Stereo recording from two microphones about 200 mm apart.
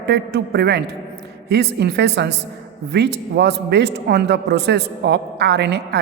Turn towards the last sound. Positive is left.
turn(degrees=-60)  # may be behind; listen again after turning